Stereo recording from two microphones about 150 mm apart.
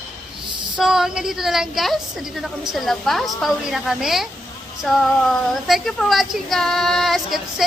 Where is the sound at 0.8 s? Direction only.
5° right (ahead or behind).